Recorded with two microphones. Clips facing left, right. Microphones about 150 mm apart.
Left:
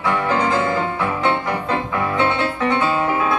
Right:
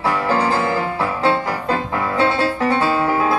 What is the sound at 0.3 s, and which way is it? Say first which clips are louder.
Music: right 1 dB; 35° right (ahead or behind).